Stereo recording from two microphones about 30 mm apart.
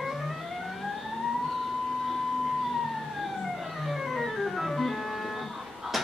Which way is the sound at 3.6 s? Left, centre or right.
Centre.